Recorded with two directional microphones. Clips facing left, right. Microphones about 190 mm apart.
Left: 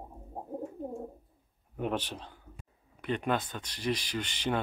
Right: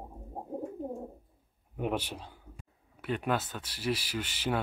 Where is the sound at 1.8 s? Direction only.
10° right (ahead or behind).